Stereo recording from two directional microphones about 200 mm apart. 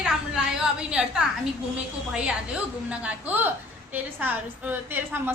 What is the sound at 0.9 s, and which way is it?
Speech, 5° right (ahead or behind).